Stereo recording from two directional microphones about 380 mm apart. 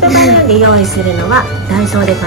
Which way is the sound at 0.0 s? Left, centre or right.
Centre.